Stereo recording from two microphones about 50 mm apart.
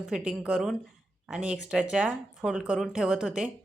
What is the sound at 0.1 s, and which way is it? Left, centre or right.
Speech, centre.